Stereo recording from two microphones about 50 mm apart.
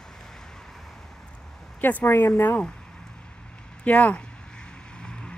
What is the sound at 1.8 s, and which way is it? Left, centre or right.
Speech, left.